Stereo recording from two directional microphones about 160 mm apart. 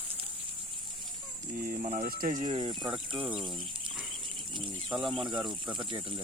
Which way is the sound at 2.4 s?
30° right (ahead or behind).